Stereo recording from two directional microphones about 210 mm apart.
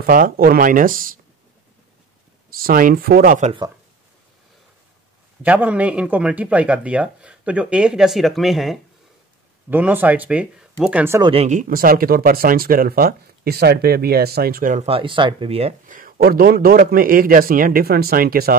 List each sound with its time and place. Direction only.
0.0 s speech: 45° right (ahead or behind)
2.5 s speech: 45° right (ahead or behind)
5.4 s speech: 5° right (ahead or behind)
11.2 s speech: 30° right (ahead or behind)